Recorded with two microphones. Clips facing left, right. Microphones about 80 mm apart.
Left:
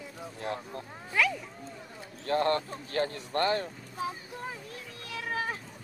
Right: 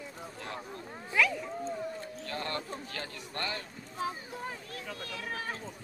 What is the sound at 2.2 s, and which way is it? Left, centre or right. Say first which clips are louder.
A man's voice: left 11 dB; left.